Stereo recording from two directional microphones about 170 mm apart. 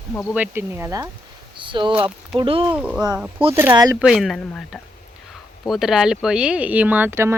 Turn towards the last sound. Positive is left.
turn(degrees=-15)  # may be behind; listen again after turning